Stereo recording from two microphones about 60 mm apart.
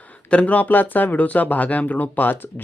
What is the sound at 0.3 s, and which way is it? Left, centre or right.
A man's voice, left.